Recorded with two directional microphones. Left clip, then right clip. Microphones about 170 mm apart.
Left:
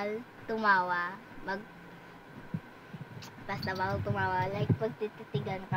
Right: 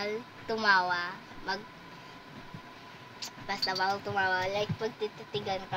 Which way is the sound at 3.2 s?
15° left (ahead or behind).